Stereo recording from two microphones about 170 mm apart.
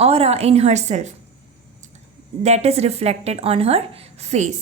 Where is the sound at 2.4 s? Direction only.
40° right (ahead or behind).